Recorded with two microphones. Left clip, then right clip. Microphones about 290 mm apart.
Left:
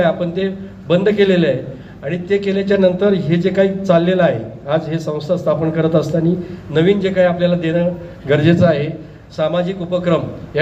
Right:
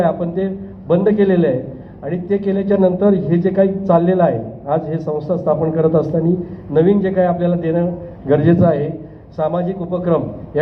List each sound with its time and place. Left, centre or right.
0.9 s a man's voice: left